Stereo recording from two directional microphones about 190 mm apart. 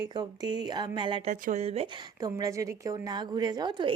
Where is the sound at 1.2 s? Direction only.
35° right (ahead or behind).